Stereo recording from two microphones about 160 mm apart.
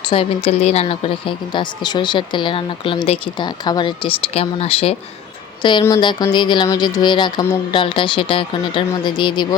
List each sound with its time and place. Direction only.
0.0 s a woman's voice: 35° left (ahead or behind)